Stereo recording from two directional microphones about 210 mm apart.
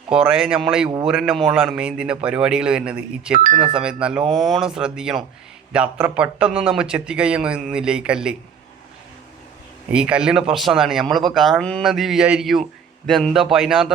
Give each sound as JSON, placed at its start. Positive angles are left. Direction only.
{"t": 0.1, "sound": "speech", "side_deg": -5}
{"t": 3.3, "sound": "speech", "side_deg": -40}
{"t": 3.7, "sound": "speech", "side_deg": -5}
{"t": 9.9, "sound": "speech", "side_deg": -5}